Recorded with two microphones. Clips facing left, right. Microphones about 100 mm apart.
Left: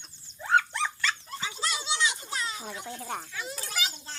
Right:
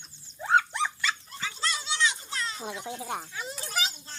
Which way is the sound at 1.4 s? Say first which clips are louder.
Even; 15° left (ahead or behind).